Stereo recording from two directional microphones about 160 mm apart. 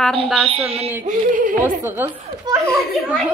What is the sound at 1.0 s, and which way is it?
Speech, 55° right (ahead or behind).